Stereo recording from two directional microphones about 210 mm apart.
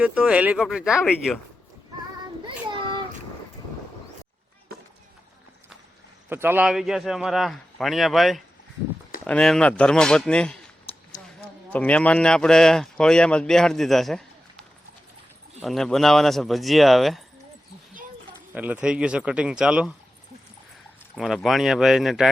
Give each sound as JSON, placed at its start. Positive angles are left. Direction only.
{"t": 0.0, "sound": "a man's voice", "side_deg": -5}
{"t": 2.4, "sound": "child singing", "side_deg": -20}
{"t": 6.2, "sound": "a man's voice", "side_deg": -10}
{"t": 10.9, "sound": "a sound", "side_deg": 25}
{"t": 11.7, "sound": "a man's voice", "side_deg": 5}
{"t": 15.6, "sound": "a man's voice", "side_deg": 0}
{"t": 18.5, "sound": "a man's voice", "side_deg": -5}
{"t": 21.2, "sound": "a man's voice", "side_deg": 0}